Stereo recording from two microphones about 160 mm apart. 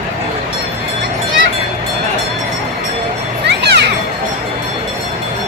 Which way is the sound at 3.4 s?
90° right.